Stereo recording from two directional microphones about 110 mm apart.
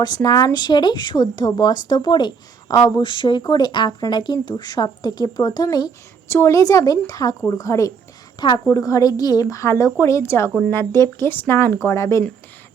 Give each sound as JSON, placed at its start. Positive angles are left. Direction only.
{"t": 0.0, "sound": "speech", "side_deg": 35}
{"t": 8.4, "sound": "a woman's voice", "side_deg": 40}